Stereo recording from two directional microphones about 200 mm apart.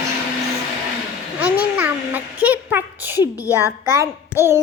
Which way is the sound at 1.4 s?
5° right (ahead or behind).